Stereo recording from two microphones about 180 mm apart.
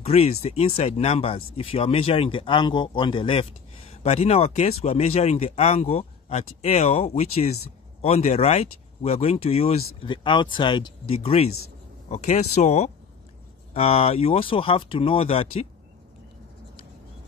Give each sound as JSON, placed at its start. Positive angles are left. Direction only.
{"t": 0.0, "sound": "speech", "side_deg": 35}